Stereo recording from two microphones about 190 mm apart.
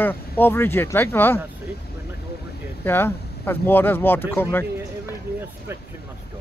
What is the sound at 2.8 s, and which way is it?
Speech, 10° left (ahead or behind).